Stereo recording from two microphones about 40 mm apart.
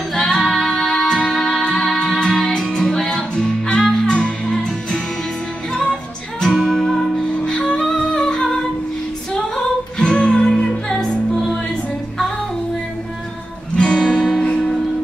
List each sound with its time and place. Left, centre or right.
0.2 s music: centre
6.5 s music: centre
6.8 s music: centre
7.7 s humming: left
10.1 s music: left
13.7 s music: centre